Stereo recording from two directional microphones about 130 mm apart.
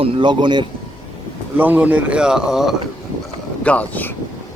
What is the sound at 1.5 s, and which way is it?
Speech, 15° right (ahead or behind).